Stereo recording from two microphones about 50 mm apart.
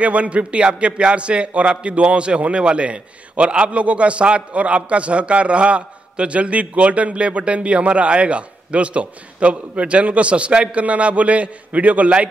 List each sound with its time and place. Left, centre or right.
0.0 s a man's voice: right